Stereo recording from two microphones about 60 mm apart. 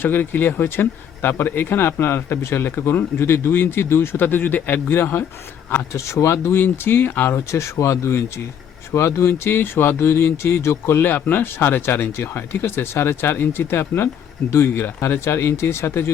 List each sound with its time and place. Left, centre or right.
0.0 s speech: left
5.9 s speech: left